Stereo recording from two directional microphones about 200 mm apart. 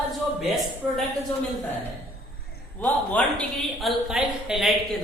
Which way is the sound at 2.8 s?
5° left (ahead or behind).